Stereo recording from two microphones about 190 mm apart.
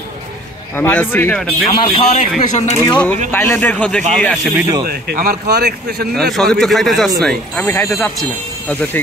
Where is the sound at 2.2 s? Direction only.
35° left (ahead or behind).